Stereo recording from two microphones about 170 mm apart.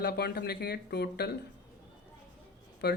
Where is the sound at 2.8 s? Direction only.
75° left (ahead or behind).